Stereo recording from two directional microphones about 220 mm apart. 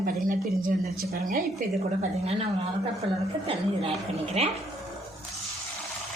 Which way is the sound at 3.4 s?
25° right (ahead or behind).